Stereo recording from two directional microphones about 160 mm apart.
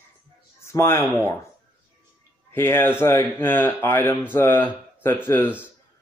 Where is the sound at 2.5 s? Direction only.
15° left (ahead or behind).